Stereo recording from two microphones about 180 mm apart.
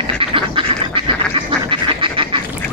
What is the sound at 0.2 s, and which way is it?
Duck, 30° right (ahead or behind).